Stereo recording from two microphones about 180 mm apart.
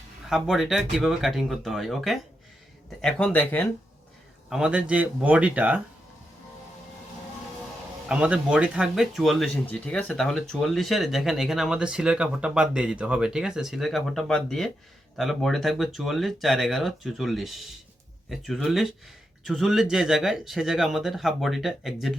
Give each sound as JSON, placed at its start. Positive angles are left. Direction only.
{"t": 0.3, "sound": "speech", "side_deg": 0}
{"t": 4.4, "sound": "speech", "side_deg": -5}
{"t": 8.0, "sound": "speech", "side_deg": -5}